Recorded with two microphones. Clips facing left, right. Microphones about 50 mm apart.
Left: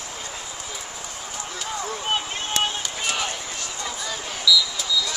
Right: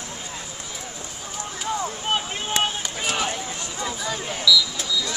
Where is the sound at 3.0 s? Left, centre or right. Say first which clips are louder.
Right 2 dB; centre.